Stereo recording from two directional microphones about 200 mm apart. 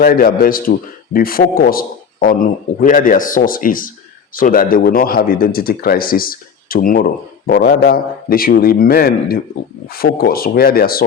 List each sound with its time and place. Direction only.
0.0 s a man's voice: 45° left (ahead or behind)